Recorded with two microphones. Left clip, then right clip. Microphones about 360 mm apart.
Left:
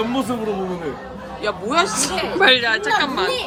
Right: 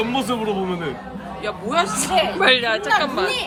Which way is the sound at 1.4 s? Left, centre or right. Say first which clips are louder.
Left 2 dB; centre.